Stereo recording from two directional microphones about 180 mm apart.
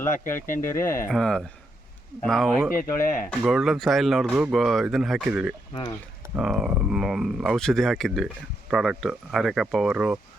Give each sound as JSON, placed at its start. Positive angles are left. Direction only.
{"t": 0.1, "sound": "speech", "side_deg": 50}
{"t": 1.0, "sound": "speech", "side_deg": 5}
{"t": 2.7, "sound": "speech", "side_deg": 50}
{"t": 3.4, "sound": "speech", "side_deg": 0}